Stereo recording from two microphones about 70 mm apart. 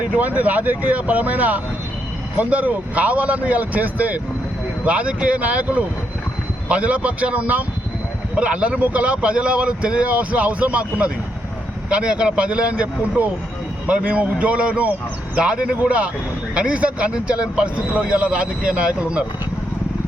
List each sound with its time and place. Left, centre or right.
0.0 s speech: right